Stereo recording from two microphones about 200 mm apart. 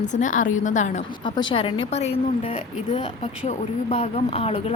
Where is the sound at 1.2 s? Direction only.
25° left (ahead or behind).